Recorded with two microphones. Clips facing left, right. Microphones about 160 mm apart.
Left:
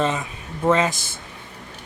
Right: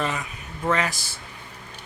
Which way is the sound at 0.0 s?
25° left (ahead or behind).